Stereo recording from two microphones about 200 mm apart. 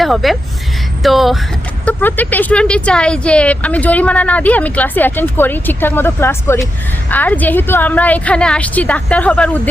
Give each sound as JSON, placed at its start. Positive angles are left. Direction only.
{"t": 0.0, "sound": "a woman's voice", "side_deg": 0}